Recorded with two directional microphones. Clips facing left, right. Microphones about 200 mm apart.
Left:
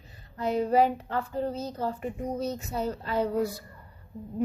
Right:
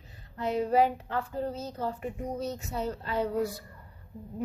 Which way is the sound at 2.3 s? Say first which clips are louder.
Left 3 dB; 40° left (ahead or behind).